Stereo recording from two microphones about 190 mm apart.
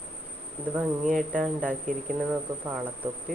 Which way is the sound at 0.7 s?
5° right (ahead or behind).